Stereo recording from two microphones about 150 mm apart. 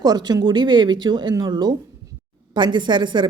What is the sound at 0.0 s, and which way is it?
A woman's voice, 25° right (ahead or behind).